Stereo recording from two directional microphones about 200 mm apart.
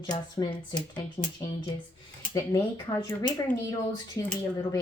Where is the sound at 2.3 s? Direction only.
15° left (ahead or behind).